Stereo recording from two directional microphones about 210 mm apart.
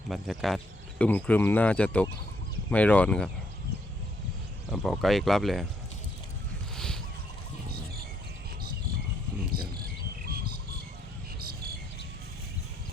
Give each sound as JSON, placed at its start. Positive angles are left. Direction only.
{"t": 0.1, "sound": "speech", "side_deg": 0}
{"t": 4.7, "sound": "speech", "side_deg": 0}
{"t": 6.7, "sound": "fowl", "side_deg": 0}
{"t": 10.2, "sound": "cricket", "side_deg": -45}